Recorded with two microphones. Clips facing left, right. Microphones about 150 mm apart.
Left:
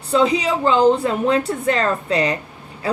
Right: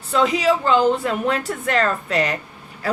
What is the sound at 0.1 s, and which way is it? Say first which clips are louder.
A woman's voice: left 1 dB; 30° left (ahead or behind).